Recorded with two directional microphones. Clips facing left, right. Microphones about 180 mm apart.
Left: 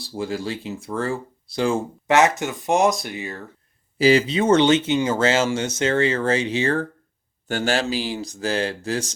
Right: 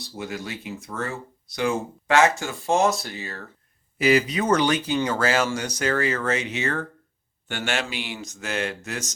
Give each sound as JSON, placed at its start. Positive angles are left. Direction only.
{"t": 0.0, "sound": "speech", "side_deg": 30}
{"t": 3.9, "sound": "speech", "side_deg": 30}